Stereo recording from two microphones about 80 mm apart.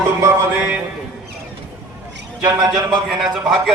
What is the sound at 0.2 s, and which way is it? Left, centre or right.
Music, right.